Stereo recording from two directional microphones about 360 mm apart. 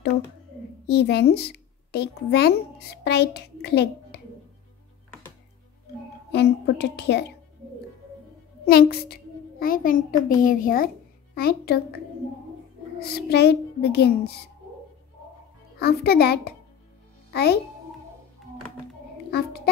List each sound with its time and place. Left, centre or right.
0.8 s a child's voice: left
6.3 s a child's voice: left
8.6 s a child's voice: left
13.0 s a child's voice: left
15.8 s a child's voice: left
19.3 s a child's voice: left